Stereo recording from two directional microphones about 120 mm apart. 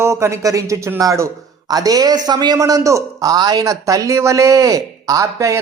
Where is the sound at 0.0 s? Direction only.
25° right (ahead or behind).